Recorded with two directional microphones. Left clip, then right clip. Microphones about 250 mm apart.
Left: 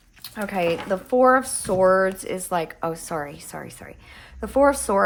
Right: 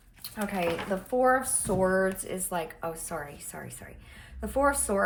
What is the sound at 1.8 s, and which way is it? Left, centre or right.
Speech, left.